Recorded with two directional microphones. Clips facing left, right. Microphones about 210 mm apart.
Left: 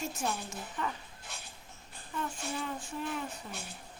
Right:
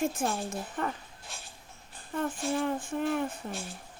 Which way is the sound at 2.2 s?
55° right (ahead or behind).